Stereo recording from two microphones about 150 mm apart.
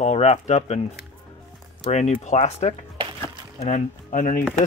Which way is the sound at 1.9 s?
50° left (ahead or behind).